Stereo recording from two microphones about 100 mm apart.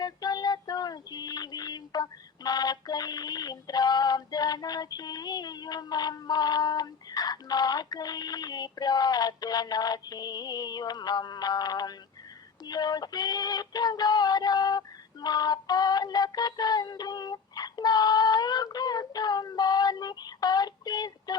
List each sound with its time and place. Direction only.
0.0 s music: 40° left (ahead or behind)
12.6 s synthetic singing: 40° left (ahead or behind)